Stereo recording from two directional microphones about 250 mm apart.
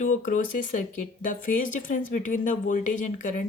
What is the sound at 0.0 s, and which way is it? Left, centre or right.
Speech, left.